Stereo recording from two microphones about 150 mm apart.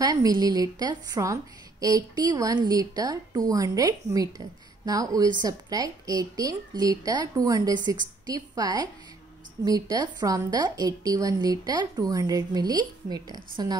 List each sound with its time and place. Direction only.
0.0 s a woman's voice: 25° right (ahead or behind)